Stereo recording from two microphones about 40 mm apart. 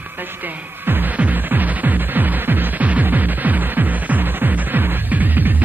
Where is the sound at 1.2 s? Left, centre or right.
Right.